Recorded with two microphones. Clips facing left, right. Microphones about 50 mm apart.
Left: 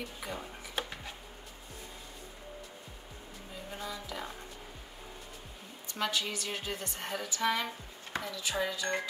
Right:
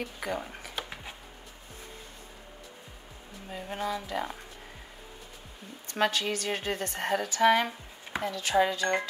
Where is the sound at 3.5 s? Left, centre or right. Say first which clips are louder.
Right 8 dB; right.